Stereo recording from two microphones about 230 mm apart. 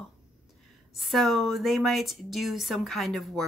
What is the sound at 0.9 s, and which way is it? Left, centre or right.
Speech, centre.